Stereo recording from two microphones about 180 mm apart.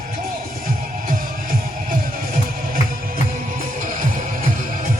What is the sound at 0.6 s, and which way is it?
Music, 50° right (ahead or behind).